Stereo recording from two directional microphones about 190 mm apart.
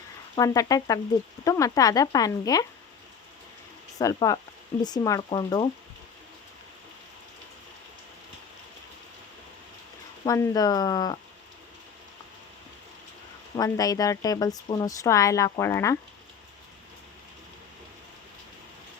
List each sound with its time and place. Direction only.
0.3 s speech: 20° left (ahead or behind)
3.9 s speech: 20° left (ahead or behind)
10.2 s speech: 20° left (ahead or behind)
13.6 s a woman's voice: 20° left (ahead or behind)